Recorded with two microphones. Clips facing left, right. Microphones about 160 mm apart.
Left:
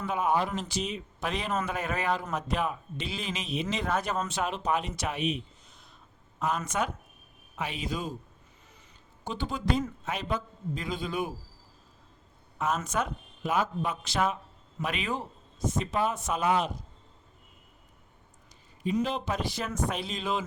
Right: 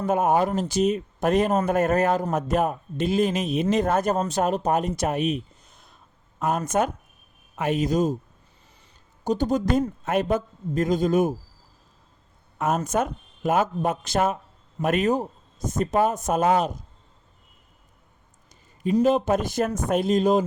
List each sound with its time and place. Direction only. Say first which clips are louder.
0.0 s speech: right 7 dB; 45° right (ahead or behind)
9.2 s speech: right 9 dB; 40° right (ahead or behind)
12.5 s speech: right 6 dB; 50° right (ahead or behind)
19.0 s speech: right 11 dB; 45° right (ahead or behind)